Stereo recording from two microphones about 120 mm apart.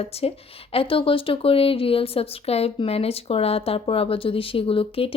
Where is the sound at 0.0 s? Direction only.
55° left (ahead or behind).